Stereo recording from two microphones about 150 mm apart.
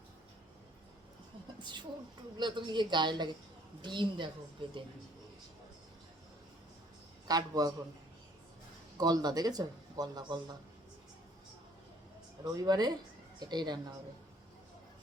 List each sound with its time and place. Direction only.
1.6 s speech: 30° right (ahead or behind)
7.3 s speech: 25° right (ahead or behind)
9.0 s speech: 25° right (ahead or behind)
12.5 s speech: 25° right (ahead or behind)